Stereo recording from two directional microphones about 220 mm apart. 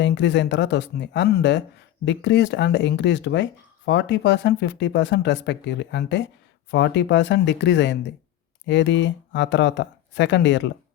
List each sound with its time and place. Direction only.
0.0 s speech: 55° left (ahead or behind)